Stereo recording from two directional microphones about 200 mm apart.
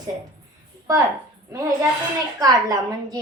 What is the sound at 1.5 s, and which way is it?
A woman's voice, 15° right (ahead or behind).